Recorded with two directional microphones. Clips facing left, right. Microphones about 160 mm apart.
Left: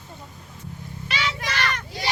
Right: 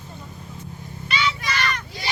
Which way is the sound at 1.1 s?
90° left.